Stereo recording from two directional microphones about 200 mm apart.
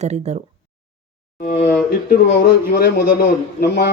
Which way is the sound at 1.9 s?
50° left (ahead or behind).